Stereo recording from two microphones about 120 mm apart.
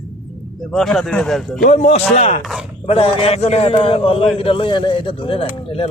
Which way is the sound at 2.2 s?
60° left (ahead or behind).